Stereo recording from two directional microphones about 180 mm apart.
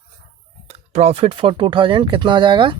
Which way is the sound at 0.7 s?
35° right (ahead or behind).